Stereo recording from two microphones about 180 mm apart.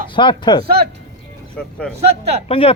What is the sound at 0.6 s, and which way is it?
Speech, 60° right (ahead or behind).